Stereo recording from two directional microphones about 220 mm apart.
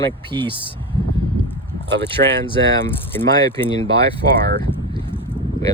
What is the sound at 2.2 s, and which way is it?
Speech, 45° right (ahead or behind).